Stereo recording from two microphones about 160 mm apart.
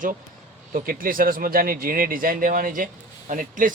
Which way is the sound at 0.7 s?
60° right (ahead or behind).